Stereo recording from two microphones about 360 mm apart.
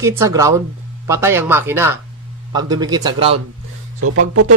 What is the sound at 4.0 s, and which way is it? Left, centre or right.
Speech, right.